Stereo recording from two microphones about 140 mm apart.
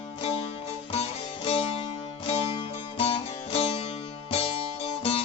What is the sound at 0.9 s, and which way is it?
Music, 45° left (ahead or behind).